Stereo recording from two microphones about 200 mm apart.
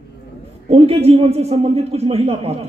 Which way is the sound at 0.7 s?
30° right (ahead or behind).